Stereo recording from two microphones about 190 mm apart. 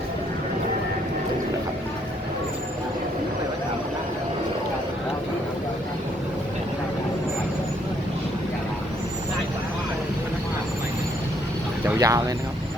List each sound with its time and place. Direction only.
11.9 s speech: 15° right (ahead or behind)